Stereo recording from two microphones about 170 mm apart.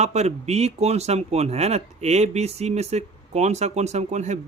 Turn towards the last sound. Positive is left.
turn(degrees=-40)  # may be behind; listen again after turning